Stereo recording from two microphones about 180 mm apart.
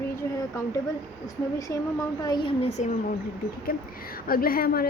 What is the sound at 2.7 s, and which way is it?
Speech, 40° left (ahead or behind).